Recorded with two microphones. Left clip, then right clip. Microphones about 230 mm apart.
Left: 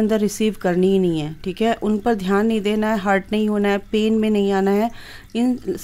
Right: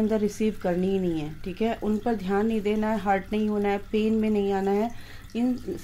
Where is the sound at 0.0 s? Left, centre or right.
Left.